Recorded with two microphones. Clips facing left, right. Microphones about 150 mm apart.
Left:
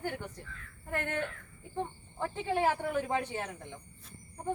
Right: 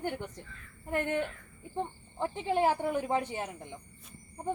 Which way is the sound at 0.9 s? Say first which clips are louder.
Right 4 dB; 15° right (ahead or behind).